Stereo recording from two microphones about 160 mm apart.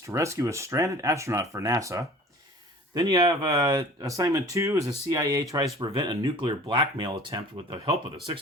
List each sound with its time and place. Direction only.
0.1 s speech: 20° right (ahead or behind); by 8.4 s 35° right (ahead or behind)